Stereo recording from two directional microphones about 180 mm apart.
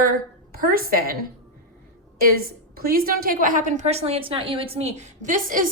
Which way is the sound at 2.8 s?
55° right (ahead or behind).